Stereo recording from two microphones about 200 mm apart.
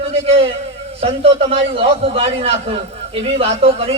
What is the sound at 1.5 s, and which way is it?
A man's voice, 30° right (ahead or behind).